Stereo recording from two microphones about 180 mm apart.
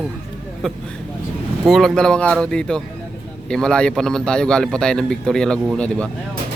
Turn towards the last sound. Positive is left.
turn(degrees=5)  # may be behind; listen again after turning